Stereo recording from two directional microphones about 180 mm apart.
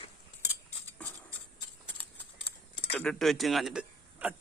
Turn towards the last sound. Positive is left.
turn(degrees=-5)  # may be behind; listen again after turning